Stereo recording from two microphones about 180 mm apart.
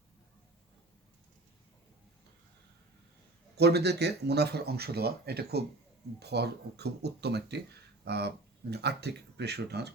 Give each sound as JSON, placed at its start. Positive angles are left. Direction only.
{"t": 3.6, "sound": "speech", "side_deg": -65}